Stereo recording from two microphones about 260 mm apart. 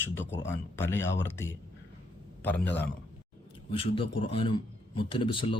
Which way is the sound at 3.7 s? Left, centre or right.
Left.